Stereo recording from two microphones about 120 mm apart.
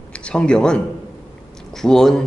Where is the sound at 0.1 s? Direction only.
10° left (ahead or behind).